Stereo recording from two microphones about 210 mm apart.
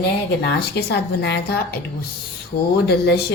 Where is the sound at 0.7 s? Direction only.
50° left (ahead or behind).